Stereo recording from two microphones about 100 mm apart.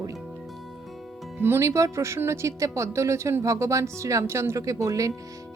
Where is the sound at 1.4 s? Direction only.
25° right (ahead or behind).